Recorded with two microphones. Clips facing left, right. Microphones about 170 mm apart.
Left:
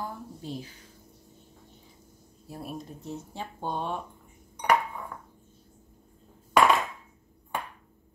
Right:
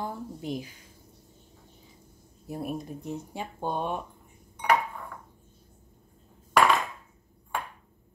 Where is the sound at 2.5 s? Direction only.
15° right (ahead or behind).